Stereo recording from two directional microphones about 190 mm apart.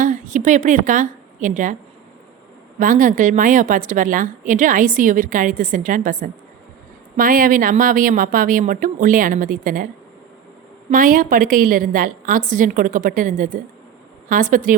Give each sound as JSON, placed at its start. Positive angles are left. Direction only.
{"t": 0.0, "sound": "a woman's voice", "side_deg": -40}
{"t": 2.7, "sound": "speech", "side_deg": -45}
{"t": 10.9, "sound": "speech", "side_deg": -45}